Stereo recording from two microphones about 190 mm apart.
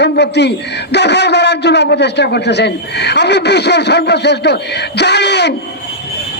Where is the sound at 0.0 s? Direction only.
60° left (ahead or behind).